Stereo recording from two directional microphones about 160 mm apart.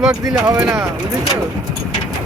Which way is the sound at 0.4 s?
20° right (ahead or behind).